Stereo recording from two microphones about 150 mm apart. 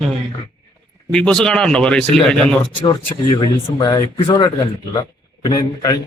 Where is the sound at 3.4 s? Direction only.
30° left (ahead or behind).